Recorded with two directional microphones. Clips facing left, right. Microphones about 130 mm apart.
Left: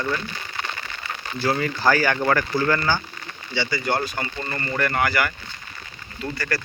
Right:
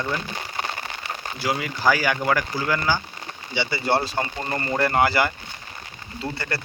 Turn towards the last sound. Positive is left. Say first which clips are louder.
# left 2 dB
turn(degrees=-25)  # may be behind; listen again after turning